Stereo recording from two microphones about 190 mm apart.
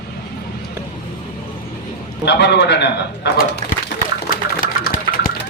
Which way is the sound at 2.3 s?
65° left (ahead or behind).